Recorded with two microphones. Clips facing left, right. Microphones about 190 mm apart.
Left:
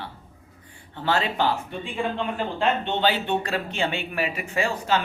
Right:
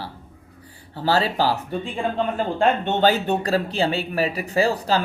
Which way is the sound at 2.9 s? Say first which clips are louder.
Right 4 dB; 45° right (ahead or behind).